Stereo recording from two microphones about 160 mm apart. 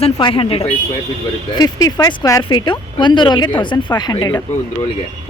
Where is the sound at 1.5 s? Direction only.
25° left (ahead or behind).